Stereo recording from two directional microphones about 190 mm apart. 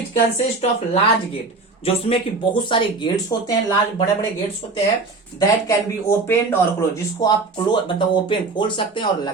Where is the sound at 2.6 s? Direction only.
25° left (ahead or behind).